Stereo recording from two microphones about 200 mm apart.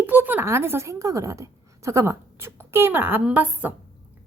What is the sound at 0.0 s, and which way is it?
A woman's voice, 10° right (ahead or behind).